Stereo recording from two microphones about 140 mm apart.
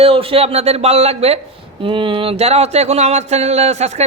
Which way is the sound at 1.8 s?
40° right (ahead or behind).